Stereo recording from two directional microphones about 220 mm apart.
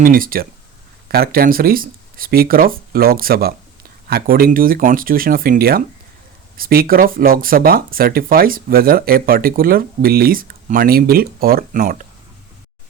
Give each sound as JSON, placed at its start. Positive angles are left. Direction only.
{"t": 0.0, "sound": "speech", "side_deg": -40}